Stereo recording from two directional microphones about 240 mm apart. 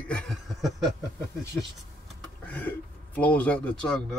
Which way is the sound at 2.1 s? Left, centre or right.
Centre.